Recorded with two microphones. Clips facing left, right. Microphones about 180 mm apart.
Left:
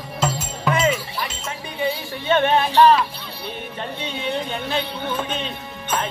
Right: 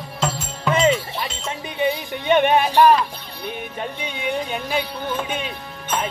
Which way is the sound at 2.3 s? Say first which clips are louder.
Right 2 dB; 15° right (ahead or behind).